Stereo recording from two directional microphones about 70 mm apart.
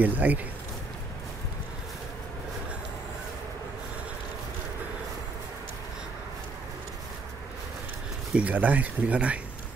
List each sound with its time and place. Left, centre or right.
0.0 s speech: right
8.4 s speech: right